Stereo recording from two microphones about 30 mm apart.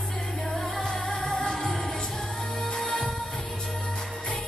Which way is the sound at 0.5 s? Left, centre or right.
Centre.